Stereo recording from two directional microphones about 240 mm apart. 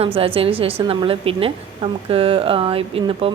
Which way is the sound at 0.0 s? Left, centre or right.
Right.